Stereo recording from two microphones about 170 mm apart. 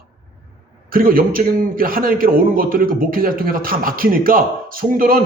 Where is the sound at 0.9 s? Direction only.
55° right (ahead or behind).